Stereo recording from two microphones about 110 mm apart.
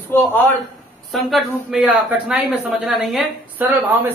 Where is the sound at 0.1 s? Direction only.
15° left (ahead or behind).